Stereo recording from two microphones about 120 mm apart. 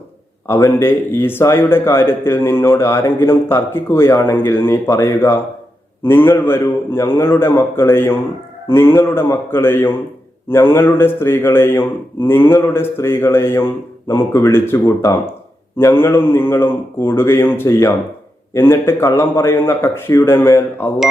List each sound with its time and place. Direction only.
0.8 s a man's voice: 20° left (ahead or behind)